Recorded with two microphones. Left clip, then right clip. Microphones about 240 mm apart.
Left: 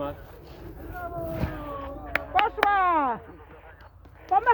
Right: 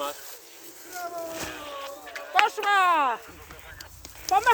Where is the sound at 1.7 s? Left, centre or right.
Right.